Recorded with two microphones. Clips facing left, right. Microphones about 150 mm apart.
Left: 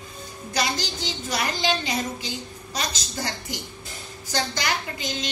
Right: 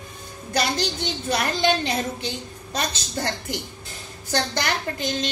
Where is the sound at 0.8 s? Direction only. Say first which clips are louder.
Right 4 dB; 60° right (ahead or behind).